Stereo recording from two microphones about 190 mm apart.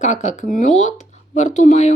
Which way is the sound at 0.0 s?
40° left (ahead or behind).